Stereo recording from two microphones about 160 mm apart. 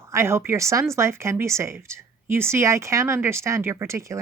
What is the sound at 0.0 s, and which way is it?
Speech, 15° right (ahead or behind).